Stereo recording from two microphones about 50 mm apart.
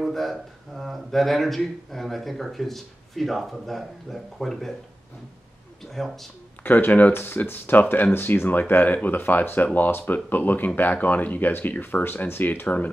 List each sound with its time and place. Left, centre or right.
0.0 s speech: centre
5.9 s speech: centre
6.6 s speech: left
7.1 s speech: left
12.6 s speech: left